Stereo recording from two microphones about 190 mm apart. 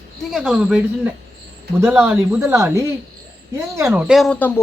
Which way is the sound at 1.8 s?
10° right (ahead or behind).